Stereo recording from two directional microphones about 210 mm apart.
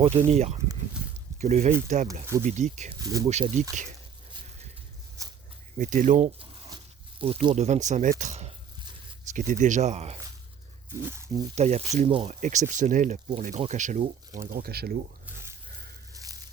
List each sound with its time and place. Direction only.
0.3 s speech: 30° right (ahead or behind)
3.0 s speech: 15° right (ahead or behind)
3.2 s speech: 30° right (ahead or behind)
5.2 s a sound: 15° right (ahead or behind)
5.7 s speech: 40° right (ahead or behind)
11.0 s speech: 15° right (ahead or behind)
11.5 s speech: 30° right (ahead or behind)
12.4 s speech: 35° right (ahead or behind)
16.1 s tearing: 15° right (ahead or behind)